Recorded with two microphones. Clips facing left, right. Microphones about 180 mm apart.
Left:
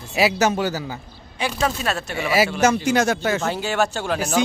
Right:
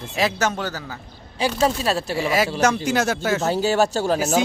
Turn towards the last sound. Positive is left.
turn(degrees=-40)  # may be behind; listen again after turning